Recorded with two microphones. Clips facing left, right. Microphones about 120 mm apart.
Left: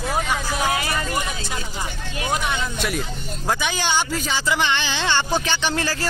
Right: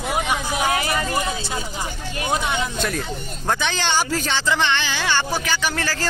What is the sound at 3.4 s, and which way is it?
Speech, 10° left (ahead or behind).